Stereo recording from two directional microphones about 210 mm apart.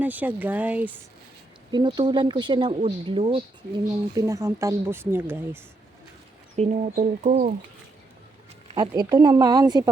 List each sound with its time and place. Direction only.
0.0 s speech: 10° right (ahead or behind)
1.7 s speech: 20° right (ahead or behind)
4.1 s speech: 15° right (ahead or behind)
6.6 s speech: 35° right (ahead or behind)
8.6 s speech: 20° right (ahead or behind)